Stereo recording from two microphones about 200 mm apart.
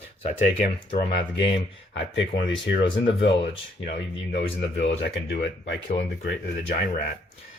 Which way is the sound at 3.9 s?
55° left (ahead or behind).